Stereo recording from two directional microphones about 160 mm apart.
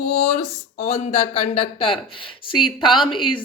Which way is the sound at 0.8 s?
40° left (ahead or behind).